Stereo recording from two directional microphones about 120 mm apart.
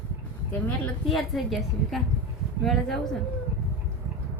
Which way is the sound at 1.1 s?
Centre (ahead or behind).